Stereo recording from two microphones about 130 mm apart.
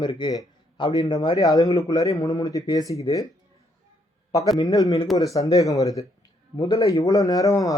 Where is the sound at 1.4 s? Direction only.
30° left (ahead or behind).